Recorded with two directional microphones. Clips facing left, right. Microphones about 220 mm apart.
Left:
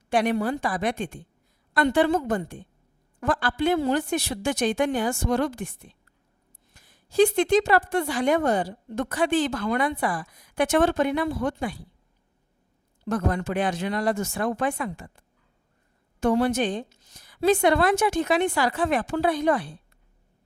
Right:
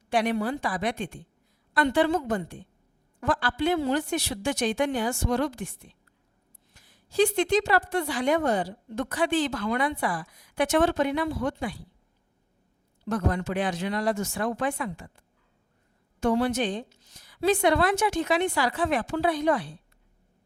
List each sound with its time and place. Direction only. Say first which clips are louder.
0.1 s a woman's voice: left 2 dB; 45° left (ahead or behind)
13.1 s a woman's voice: left 2 dB; 50° left (ahead or behind)
16.2 s a woman's voice: left 2 dB; 50° left (ahead or behind)